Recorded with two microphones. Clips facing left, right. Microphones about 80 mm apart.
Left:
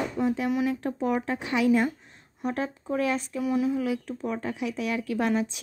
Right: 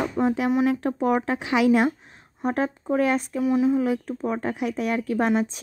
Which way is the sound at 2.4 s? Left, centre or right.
Right.